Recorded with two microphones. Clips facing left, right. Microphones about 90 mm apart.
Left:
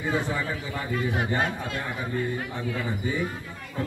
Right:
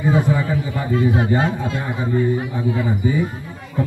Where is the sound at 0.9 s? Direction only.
25° right (ahead or behind).